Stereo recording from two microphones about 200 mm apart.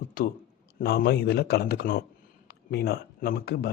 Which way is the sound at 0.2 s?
45° left (ahead or behind).